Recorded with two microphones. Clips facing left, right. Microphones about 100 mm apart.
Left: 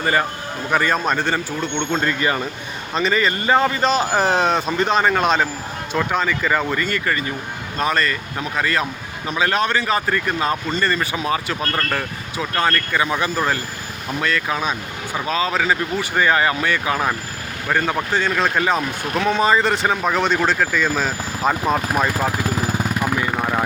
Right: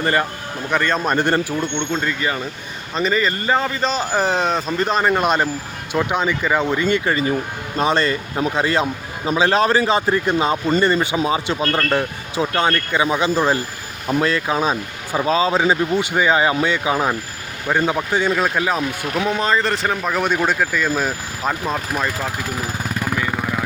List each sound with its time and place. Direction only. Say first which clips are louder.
0.0 s speech: even; 5° left (ahead or behind)
2.9 s speech: even; centre (ahead or behind)
21.6 s speech: left 3 dB; 10° left (ahead or behind)
23.0 s vehicle: right 2 dB; 10° left (ahead or behind)